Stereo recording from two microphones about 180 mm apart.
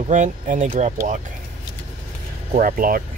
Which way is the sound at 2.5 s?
50° right (ahead or behind).